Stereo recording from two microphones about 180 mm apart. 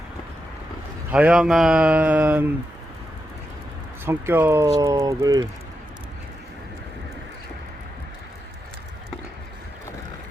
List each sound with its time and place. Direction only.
1.1 s speech: 5° right (ahead or behind)
4.0 s speech: 10° right (ahead or behind)